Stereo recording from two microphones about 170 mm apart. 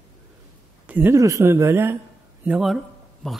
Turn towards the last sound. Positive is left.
turn(degrees=0)  # may be behind; listen again after turning